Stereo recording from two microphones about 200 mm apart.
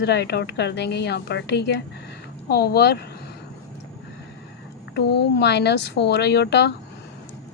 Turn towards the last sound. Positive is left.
turn(degrees=60)  # may be behind; listen again after turning